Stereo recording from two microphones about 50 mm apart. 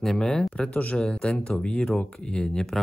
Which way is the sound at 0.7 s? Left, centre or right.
Left.